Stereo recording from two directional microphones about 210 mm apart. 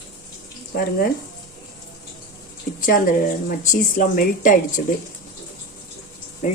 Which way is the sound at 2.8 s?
40° left (ahead or behind).